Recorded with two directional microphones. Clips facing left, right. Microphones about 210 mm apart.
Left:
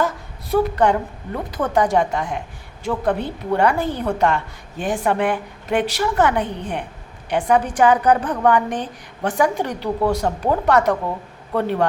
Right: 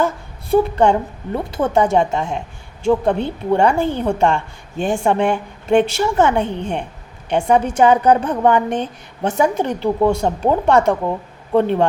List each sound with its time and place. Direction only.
0.5 s a woman's voice: 25° right (ahead or behind)